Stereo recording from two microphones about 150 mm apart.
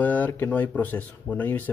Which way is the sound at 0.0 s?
10° left (ahead or behind).